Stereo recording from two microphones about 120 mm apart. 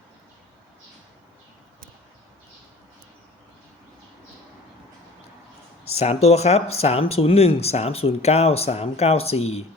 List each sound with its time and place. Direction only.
5.9 s speech: 60° left (ahead or behind)